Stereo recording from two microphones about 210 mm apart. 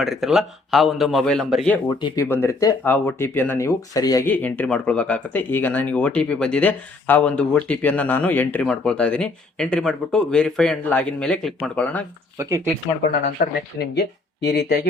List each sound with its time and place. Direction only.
0.0 s speech: centre (ahead or behind)
2.0 s speech: 20° left (ahead or behind)
2.2 s speech: 10° left (ahead or behind)
12.4 s speech: 15° right (ahead or behind)
13.4 s speech: 45° left (ahead or behind)